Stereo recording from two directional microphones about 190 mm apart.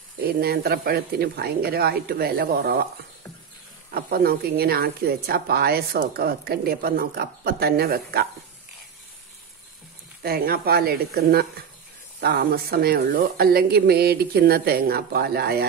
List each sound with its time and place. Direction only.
0.2 s a woman's voice: 55° right (ahead or behind)
3.9 s a woman's voice: 50° right (ahead or behind)
10.2 s a woman's voice: 55° right (ahead or behind)